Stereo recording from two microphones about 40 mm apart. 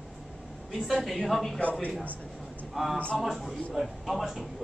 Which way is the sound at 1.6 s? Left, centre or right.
Left.